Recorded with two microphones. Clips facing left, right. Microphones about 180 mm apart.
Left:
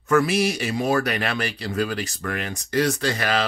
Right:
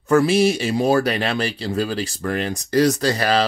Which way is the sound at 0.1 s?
30° right (ahead or behind).